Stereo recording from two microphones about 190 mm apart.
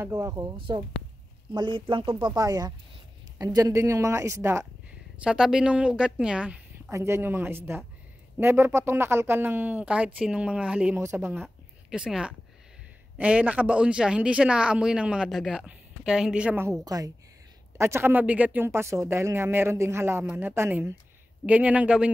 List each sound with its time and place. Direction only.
0.0 s speech: 15° right (ahead or behind)